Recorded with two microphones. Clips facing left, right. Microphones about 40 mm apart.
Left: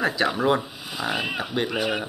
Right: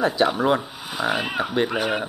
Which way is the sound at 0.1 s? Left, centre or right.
Centre.